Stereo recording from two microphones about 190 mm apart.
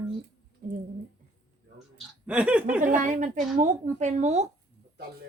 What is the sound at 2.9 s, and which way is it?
Speech, 40° right (ahead or behind).